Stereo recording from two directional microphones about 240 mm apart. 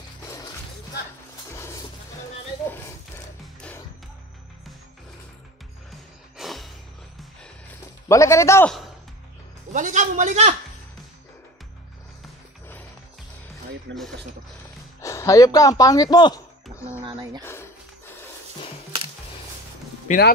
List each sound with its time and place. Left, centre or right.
1.5 s music: centre
5.9 s music: centre
8.1 s a man's voice: centre
9.7 s a man's voice: right
13.9 s speech: right
15.0 s speech: centre
17.0 s a sound: centre
17.4 s a sound: centre
20.1 s speech: left